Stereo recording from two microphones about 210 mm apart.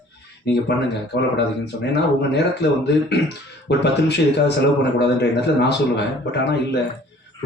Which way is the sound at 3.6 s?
55° left (ahead or behind).